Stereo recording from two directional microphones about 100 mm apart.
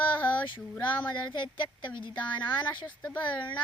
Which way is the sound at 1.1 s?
50° left (ahead or behind).